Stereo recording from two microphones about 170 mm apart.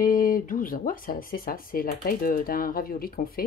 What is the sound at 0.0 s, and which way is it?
Speech, 55° left (ahead or behind).